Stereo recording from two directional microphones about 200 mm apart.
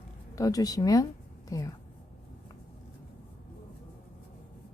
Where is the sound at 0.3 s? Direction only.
15° left (ahead or behind).